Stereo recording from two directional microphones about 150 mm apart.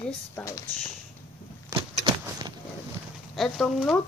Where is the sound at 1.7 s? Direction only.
30° right (ahead or behind).